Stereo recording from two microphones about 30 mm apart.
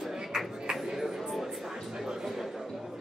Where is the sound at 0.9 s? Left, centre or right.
Centre.